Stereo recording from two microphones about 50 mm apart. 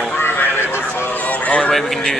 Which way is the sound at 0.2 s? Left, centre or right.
Left.